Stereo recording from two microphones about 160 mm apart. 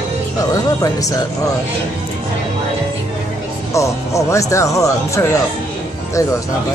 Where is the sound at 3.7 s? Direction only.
20° left (ahead or behind).